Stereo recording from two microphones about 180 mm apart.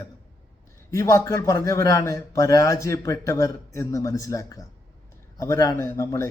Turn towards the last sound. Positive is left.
turn(degrees=15)  # may be behind; listen again after turning